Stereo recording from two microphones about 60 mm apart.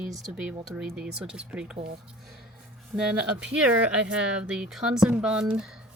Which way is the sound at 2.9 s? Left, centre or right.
Centre.